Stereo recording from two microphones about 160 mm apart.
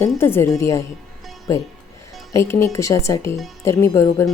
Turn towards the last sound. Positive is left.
turn(degrees=20)  # may be behind; listen again after turning